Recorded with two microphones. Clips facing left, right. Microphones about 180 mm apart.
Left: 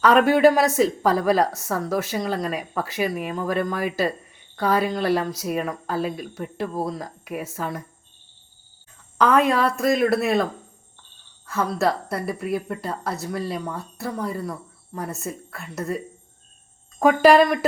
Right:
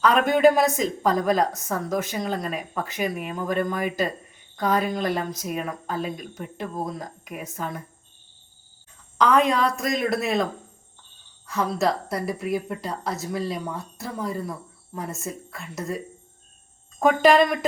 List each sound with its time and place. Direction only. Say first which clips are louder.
0.3 s a woman's voice: left 1 dB; 10° left (ahead or behind)
9.1 s a woman's voice: left 1 dB; 5° left (ahead or behind)
9.6 s speech: left 4 dB; 60° left (ahead or behind)
10.0 s speech: left 1 dB; centre (ahead or behind)
11.4 s speech: left 1 dB; centre (ahead or behind)
17.0 s a woman's voice: left 3 dB; 5° left (ahead or behind)